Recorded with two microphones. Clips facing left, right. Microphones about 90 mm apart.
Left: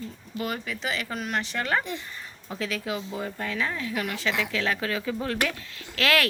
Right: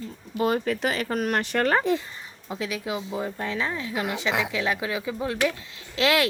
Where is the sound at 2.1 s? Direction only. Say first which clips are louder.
Right 2 dB; 20° right (ahead or behind).